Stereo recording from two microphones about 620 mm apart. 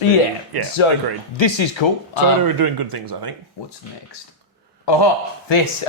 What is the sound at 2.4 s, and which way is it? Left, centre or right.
Speech, right.